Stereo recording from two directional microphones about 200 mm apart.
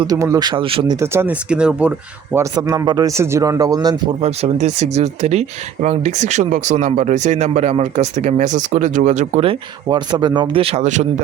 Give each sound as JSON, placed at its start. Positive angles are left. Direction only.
{"t": 0.0, "sound": "speech", "side_deg": -15}
{"t": 0.9, "sound": "speech", "side_deg": -10}
{"t": 2.3, "sound": "speech", "side_deg": -15}
{"t": 4.2, "sound": "speech", "side_deg": -30}